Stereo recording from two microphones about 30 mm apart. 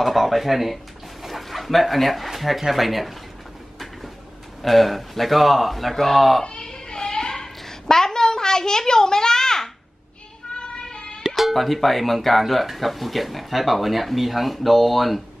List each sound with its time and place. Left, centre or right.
0.0 s speech: centre
4.6 s speech: centre
6.6 s a sound: left
10.5 s child singing: left
11.2 s speech: centre